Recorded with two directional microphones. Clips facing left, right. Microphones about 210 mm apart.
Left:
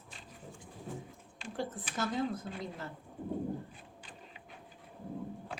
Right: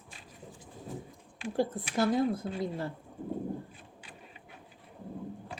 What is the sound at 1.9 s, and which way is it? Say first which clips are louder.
Speech: right 7 dB; 35° right (ahead or behind).